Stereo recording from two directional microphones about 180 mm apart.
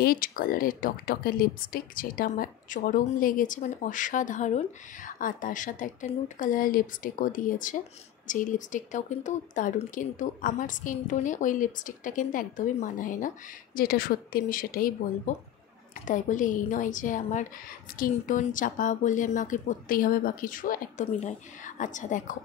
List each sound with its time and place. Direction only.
0.0 s speech: 50° left (ahead or behind)